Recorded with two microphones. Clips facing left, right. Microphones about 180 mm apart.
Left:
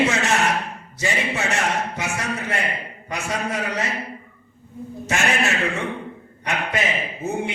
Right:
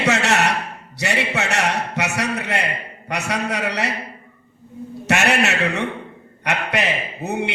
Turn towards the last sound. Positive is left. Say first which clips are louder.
# right 1 dB
turn(degrees=-70)  # may be behind; listen again after turning